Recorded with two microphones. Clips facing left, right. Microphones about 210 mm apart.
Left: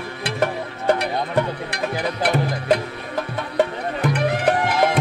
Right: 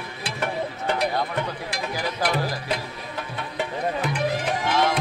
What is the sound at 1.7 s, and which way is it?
Music, 60° left (ahead or behind).